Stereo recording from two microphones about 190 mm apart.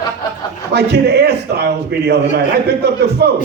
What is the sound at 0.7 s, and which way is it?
Speech, 60° right (ahead or behind).